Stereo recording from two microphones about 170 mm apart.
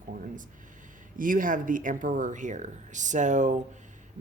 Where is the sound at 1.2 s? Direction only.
50° right (ahead or behind).